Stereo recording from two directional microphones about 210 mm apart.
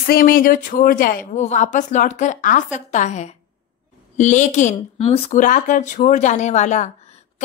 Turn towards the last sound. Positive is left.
turn(degrees=35)  # may be behind; listen again after turning